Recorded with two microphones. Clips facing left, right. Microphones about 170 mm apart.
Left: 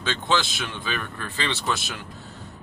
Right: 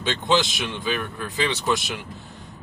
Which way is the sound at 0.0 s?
20° right (ahead or behind).